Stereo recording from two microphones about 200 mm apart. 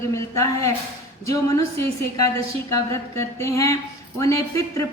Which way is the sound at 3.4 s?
15° left (ahead or behind).